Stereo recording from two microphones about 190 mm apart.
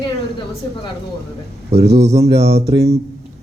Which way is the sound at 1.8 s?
60° right (ahead or behind).